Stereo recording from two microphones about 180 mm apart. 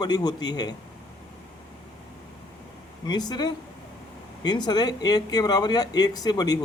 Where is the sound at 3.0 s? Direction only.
25° left (ahead or behind).